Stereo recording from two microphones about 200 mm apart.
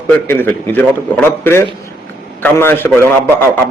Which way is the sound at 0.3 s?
10° left (ahead or behind).